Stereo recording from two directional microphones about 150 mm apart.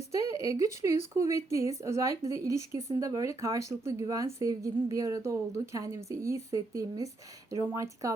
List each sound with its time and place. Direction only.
0.4 s speech: 20° right (ahead or behind)